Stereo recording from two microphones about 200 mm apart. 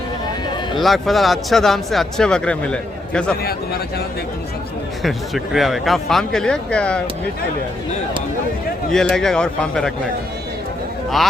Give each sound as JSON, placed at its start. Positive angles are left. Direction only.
{"t": 0.8, "sound": "speech", "side_deg": 0}
{"t": 3.4, "sound": "speech", "side_deg": 50}
{"t": 5.0, "sound": "speech", "side_deg": 0}
{"t": 8.9, "sound": "speech", "side_deg": 5}